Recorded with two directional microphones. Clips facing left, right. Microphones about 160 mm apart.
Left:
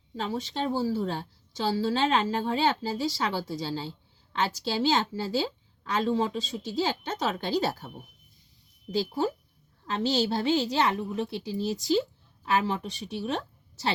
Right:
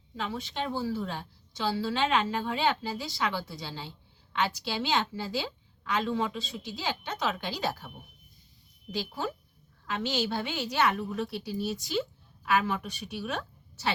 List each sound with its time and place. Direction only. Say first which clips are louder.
0.2 s a woman's voice: left 3 dB; 35° left (ahead or behind)
9.8 s a woman's voice: left 4 dB; 35° left (ahead or behind)